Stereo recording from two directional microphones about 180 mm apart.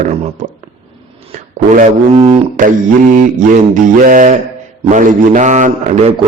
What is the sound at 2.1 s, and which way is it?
Speech, 30° right (ahead or behind).